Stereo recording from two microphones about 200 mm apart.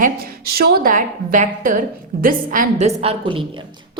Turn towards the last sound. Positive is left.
turn(degrees=-30)  # may be behind; listen again after turning